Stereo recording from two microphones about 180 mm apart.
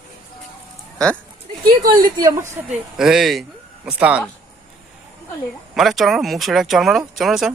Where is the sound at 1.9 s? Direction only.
50° right (ahead or behind).